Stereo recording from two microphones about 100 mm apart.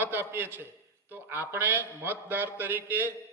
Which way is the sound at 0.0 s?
20° right (ahead or behind).